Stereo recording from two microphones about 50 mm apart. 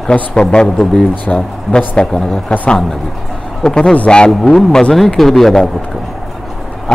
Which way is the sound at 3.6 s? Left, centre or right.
Centre.